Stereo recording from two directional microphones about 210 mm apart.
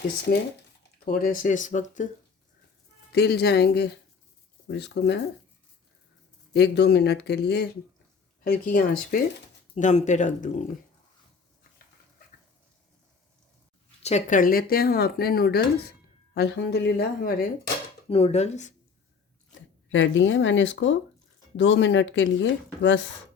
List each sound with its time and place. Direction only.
1.0 s speech: 40° left (ahead or behind)
3.1 s speech: 50° left (ahead or behind)
6.5 s speech: 55° left (ahead or behind)
9.7 s speech: 35° left (ahead or behind)
14.0 s speech: 35° left (ahead or behind); by 17.3 s 50° left (ahead or behind)
18.1 s speech: 30° left (ahead or behind)
19.9 s speech: 65° left (ahead or behind)